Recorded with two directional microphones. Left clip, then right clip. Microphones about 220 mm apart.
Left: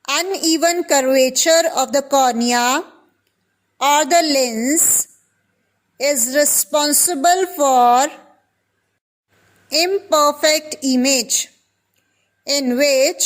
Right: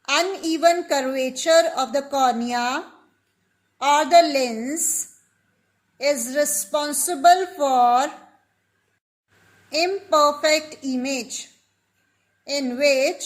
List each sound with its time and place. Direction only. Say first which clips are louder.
0.0 s a woman's voice: left 3 dB; 50° left (ahead or behind)
6.0 s a woman's voice: left 5 dB; 50° left (ahead or behind)
9.6 s a woman's voice: left 5 dB; 45° left (ahead or behind)
12.5 s a woman's voice: left 4 dB; 45° left (ahead or behind)